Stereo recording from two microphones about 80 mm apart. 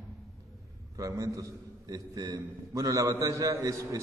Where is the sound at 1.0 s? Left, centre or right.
Right.